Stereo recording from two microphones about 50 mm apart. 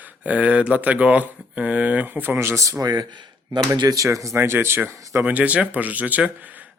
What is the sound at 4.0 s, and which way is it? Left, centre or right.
Speech, right.